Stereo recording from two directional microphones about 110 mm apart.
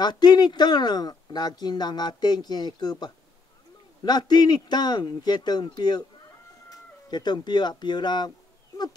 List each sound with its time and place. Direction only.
0.0 s speech: 40° left (ahead or behind)